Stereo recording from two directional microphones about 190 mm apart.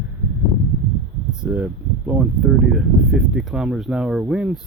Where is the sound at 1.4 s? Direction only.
10° right (ahead or behind).